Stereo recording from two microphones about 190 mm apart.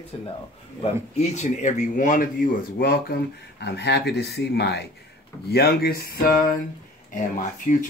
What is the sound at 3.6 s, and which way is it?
Speech, 60° left (ahead or behind).